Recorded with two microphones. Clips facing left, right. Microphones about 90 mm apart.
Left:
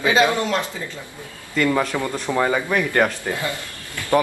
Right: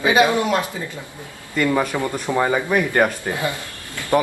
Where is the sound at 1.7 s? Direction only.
10° right (ahead or behind).